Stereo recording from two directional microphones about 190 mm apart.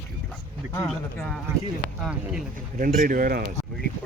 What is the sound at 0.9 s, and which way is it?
Speech, centre (ahead or behind).